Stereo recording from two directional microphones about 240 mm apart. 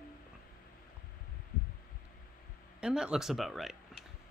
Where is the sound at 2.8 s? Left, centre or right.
Centre.